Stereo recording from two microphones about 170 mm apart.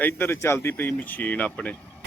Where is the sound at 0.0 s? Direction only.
15° left (ahead or behind).